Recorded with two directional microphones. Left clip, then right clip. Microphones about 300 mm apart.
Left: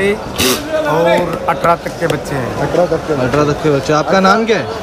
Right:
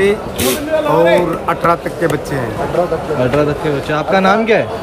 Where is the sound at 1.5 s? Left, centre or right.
Centre.